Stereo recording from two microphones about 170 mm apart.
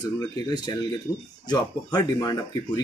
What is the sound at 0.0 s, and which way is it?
Speech, 25° left (ahead or behind).